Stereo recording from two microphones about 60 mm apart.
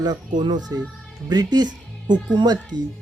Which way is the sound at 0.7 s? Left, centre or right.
Right.